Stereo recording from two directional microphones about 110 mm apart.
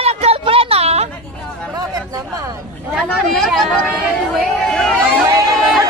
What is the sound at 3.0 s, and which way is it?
Speech, 5° left (ahead or behind).